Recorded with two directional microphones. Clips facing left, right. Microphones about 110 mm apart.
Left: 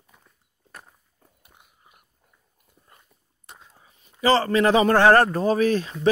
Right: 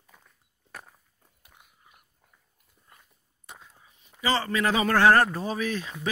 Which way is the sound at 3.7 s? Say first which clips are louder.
Left 2 dB; 40° left (ahead or behind).